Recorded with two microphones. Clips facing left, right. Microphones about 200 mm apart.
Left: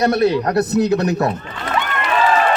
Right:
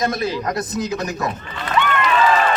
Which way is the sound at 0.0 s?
65° left (ahead or behind).